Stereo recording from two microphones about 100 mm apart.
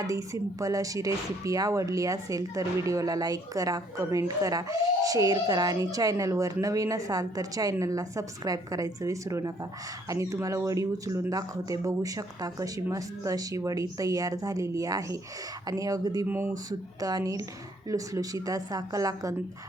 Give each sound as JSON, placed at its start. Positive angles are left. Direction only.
{"t": 0.0, "sound": "speech", "side_deg": -35}
{"t": 16.2, "sound": "speech", "side_deg": -20}
{"t": 17.0, "sound": "speech", "side_deg": -40}